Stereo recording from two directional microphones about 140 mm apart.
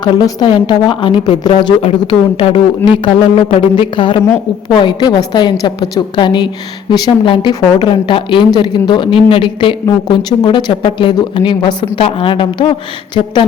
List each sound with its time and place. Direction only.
0.0 s a woman's voice: 30° left (ahead or behind)